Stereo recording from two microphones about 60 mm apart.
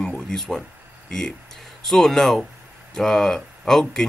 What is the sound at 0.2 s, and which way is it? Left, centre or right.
Speech, centre.